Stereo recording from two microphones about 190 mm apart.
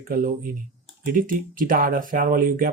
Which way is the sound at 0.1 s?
45° right (ahead or behind).